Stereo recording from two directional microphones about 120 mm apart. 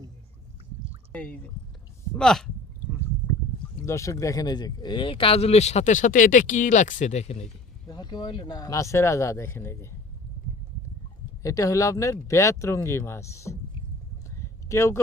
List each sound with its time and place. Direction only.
1.1 s speech: 10° left (ahead or behind)
3.8 s speech: 25° left (ahead or behind); by 7.4 s 65° left (ahead or behind)
7.9 s speech: 35° left (ahead or behind); by 9.9 s 20° left (ahead or behind)
11.4 s speech: 25° left (ahead or behind)
14.3 s a sound: 25° left (ahead or behind)